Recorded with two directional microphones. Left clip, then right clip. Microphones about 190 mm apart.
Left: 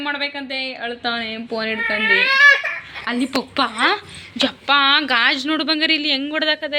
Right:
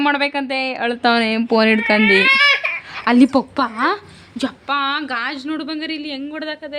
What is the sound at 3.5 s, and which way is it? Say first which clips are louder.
A woman's voice: left 1 dB; 25° right (ahead or behind).